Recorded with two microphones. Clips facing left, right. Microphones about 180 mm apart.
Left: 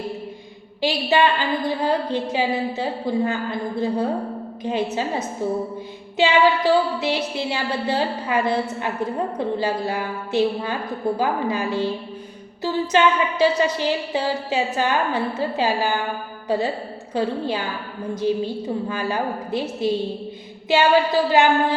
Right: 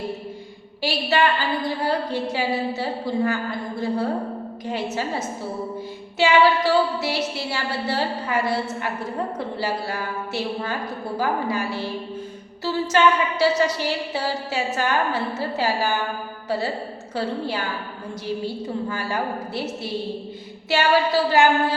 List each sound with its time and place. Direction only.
0.8 s a woman's voice: 15° left (ahead or behind)
6.1 s a woman's voice: 15° left (ahead or behind)
12.9 s a woman's voice: 20° left (ahead or behind)